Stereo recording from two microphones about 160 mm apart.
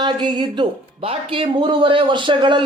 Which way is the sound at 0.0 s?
30° right (ahead or behind).